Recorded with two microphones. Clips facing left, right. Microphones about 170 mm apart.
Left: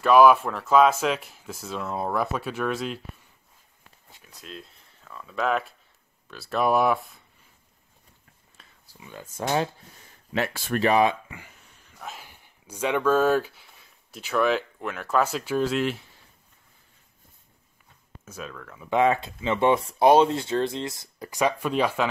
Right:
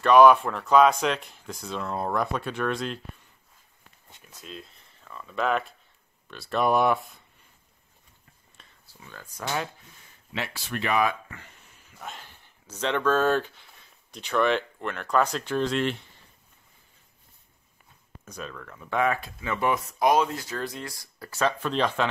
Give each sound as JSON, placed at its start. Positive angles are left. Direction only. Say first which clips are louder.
{"t": 0.0, "sound": "speech", "louder": "even", "side_deg": 5}
{"t": 4.1, "sound": "speech", "louder": "even", "side_deg": 0}
{"t": 8.8, "sound": "speech", "louder": "left 4 dB", "side_deg": 15}
{"t": 10.3, "sound": "speech", "louder": "left 7 dB", "side_deg": 45}
{"t": 11.2, "sound": "speech", "louder": "left 2 dB", "side_deg": 10}
{"t": 11.5, "sound": "speech", "louder": "even", "side_deg": 0}
{"t": 18.2, "sound": "speech", "louder": "even", "side_deg": 5}
{"t": 18.9, "sound": "speech", "louder": "left 4 dB", "side_deg": 25}